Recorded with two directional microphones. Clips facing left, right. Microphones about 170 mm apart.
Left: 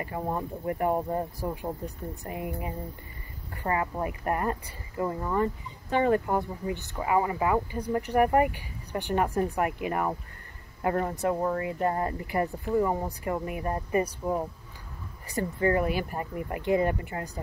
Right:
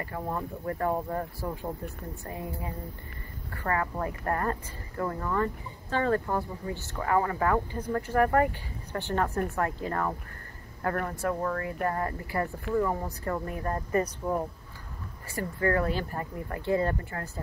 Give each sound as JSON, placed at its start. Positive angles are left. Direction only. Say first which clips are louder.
{"t": 0.0, "sound": "speech", "louder": "left 2 dB", "side_deg": 20}